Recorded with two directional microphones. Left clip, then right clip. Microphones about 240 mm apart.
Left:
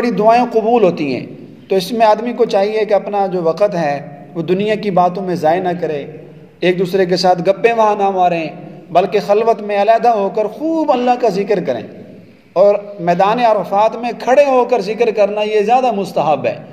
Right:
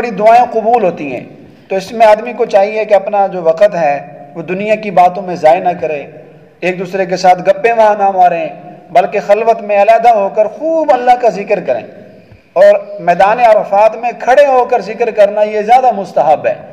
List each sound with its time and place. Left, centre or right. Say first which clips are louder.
0.0 s a man's voice: right 4 dB; left